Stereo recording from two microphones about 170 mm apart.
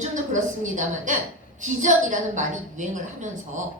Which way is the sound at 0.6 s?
45° right (ahead or behind).